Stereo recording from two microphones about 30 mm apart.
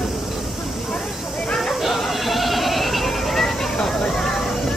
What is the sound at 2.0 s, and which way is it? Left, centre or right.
Sheep, centre.